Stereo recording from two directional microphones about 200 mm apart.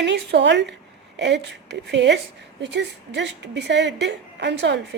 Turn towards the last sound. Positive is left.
turn(degrees=-60)  # may be behind; listen again after turning